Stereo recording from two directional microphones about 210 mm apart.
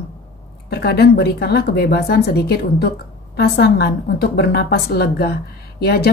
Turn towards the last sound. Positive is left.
turn(degrees=45)  # may be behind; listen again after turning